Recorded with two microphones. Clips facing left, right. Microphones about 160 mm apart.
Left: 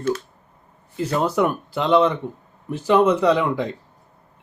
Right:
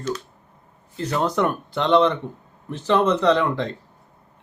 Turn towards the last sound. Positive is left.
turn(degrees=10)  # may be behind; listen again after turning